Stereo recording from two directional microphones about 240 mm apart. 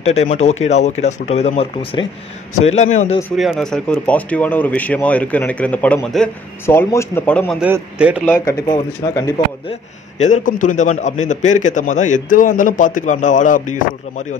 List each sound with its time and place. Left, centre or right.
0.0 s speech: left
3.2 s speech: centre
7.6 s speech: centre
8.3 s speech: centre
9.7 s a man's voice: left